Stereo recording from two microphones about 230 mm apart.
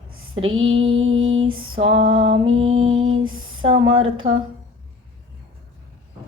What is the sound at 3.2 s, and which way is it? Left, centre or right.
Female singing, right.